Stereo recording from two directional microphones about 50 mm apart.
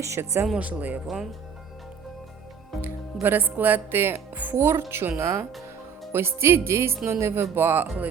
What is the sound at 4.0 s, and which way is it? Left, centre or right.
Speech, right.